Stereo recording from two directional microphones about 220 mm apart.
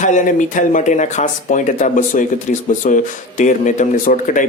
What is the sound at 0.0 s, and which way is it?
Speech, 35° left (ahead or behind).